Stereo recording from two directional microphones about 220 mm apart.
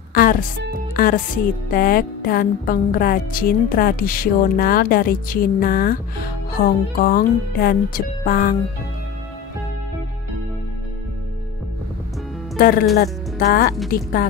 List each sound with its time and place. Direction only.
0.1 s speech: 40° left (ahead or behind)
6.6 s music: 45° left (ahead or behind)
12.5 s speech: 40° left (ahead or behind)